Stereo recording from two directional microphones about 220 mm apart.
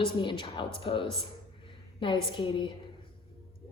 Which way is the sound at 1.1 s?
25° left (ahead or behind).